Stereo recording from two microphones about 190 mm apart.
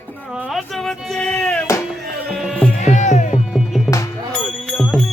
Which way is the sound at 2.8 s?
40° left (ahead or behind).